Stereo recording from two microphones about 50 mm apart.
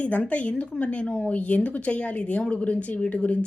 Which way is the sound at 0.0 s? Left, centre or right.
Left.